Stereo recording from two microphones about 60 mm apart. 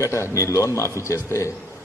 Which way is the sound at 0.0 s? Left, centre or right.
Left.